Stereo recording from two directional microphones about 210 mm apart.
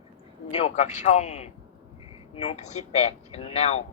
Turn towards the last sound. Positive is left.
turn(degrees=30)  # may be behind; listen again after turning